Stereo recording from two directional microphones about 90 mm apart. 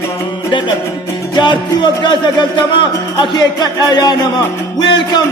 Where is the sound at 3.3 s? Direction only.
55° left (ahead or behind).